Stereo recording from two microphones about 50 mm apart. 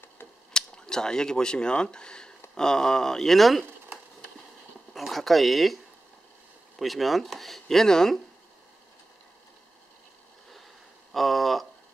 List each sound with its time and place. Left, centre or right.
0.5 s speech: centre
4.9 s speech: centre
6.8 s speech: centre
11.1 s a sound: centre